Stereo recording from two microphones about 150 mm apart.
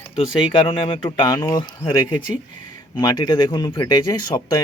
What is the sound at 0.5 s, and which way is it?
Speech, 35° left (ahead or behind).